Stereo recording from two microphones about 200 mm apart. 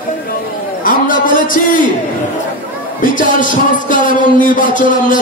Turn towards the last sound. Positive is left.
turn(degrees=40)  # may be behind; listen again after turning